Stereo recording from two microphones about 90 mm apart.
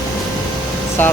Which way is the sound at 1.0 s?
20° left (ahead or behind).